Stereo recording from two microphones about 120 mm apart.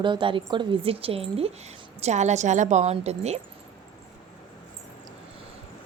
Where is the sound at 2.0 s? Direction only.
70° right (ahead or behind).